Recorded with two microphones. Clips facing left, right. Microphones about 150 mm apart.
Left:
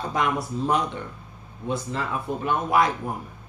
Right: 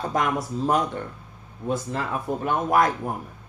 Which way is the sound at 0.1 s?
45° right (ahead or behind).